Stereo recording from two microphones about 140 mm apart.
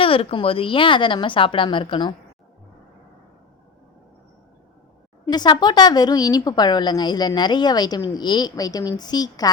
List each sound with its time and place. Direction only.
0.0 s a woman's voice: 40° left (ahead or behind)
5.2 s speech: 30° left (ahead or behind)